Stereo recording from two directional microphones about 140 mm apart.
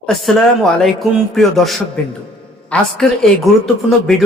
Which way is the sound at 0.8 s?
Centre (ahead or behind).